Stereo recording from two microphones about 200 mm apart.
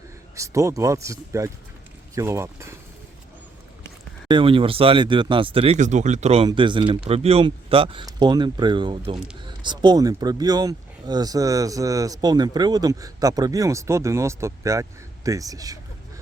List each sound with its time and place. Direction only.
0.3 s speech: 15° right (ahead or behind)
4.3 s speech: 25° right (ahead or behind)